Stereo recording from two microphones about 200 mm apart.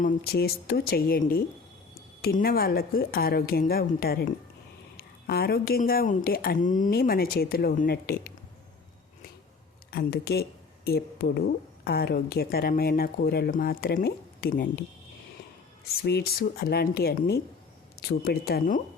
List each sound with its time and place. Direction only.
0.0 s a woman's voice: 50° left (ahead or behind)
9.9 s a woman's voice: 50° left (ahead or behind)
15.9 s a woman's voice: 55° left (ahead or behind)